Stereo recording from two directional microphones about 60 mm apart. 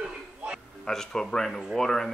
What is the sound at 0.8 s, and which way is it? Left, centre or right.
Speech, centre.